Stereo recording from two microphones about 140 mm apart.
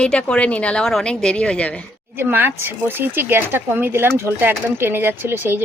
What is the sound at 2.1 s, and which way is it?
Speech, 15° right (ahead or behind).